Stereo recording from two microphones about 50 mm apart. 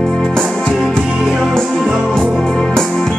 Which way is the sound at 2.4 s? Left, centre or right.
Centre.